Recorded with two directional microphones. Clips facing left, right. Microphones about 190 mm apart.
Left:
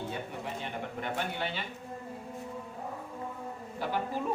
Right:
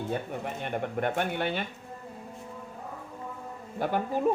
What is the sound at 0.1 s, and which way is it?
Speech, 50° right (ahead or behind).